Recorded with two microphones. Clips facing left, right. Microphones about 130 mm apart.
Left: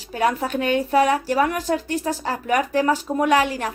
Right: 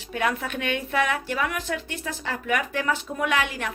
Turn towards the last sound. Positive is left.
turn(degrees=35)  # may be behind; listen again after turning